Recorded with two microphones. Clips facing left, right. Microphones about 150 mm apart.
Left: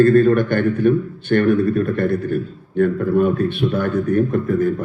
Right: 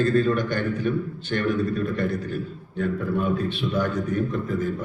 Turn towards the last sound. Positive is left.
turn(degrees=55)  # may be behind; listen again after turning